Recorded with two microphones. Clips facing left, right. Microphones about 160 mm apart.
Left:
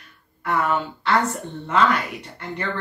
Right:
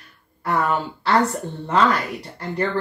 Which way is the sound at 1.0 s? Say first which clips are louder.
Right 2 dB; 35° right (ahead or behind).